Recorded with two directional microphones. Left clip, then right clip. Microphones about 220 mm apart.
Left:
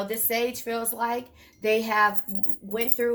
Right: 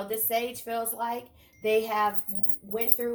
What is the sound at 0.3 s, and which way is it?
Speech, 35° left (ahead or behind).